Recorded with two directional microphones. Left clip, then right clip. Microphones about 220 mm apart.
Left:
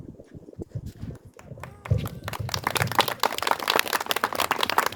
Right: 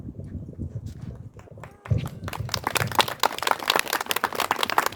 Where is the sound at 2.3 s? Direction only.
35° left (ahead or behind).